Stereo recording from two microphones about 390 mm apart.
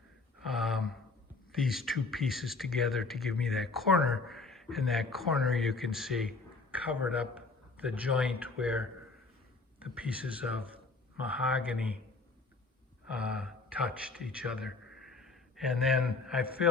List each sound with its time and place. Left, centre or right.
0.4 s gasp: centre
1.5 s a man's voice: centre
9.9 s speech: centre
13.1 s speech: centre